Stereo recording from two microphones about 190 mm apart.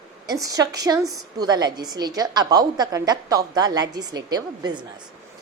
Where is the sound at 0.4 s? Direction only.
20° right (ahead or behind).